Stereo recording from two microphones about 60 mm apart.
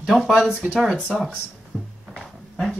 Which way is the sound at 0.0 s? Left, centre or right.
Centre.